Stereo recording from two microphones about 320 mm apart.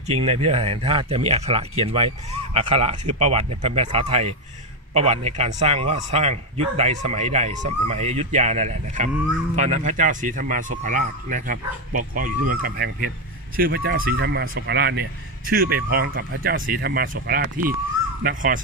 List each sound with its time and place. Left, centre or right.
0.0 s a man's voice: centre